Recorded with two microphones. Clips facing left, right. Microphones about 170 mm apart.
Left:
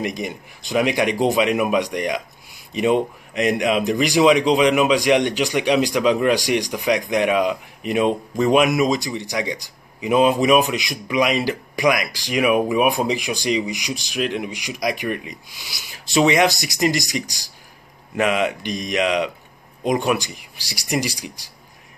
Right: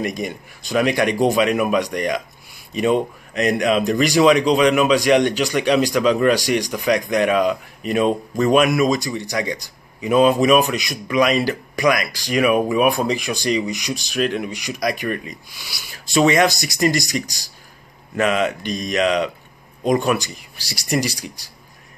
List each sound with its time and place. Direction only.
0.0 s speech: 15° left (ahead or behind)
18.1 s speech: 15° left (ahead or behind)